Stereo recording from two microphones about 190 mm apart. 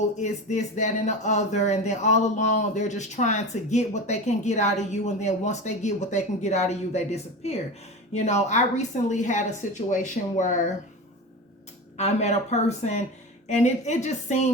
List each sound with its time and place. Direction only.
0.2 s speech: 40° left (ahead or behind)
11.9 s speech: 35° left (ahead or behind)